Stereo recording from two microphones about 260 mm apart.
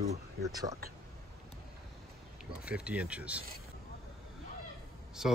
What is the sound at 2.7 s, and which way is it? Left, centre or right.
Speech, centre.